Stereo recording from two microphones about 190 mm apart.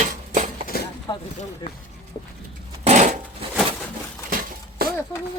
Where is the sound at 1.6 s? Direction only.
20° left (ahead or behind).